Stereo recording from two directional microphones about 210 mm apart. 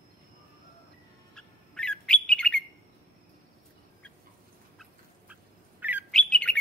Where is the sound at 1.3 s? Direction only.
5° left (ahead or behind).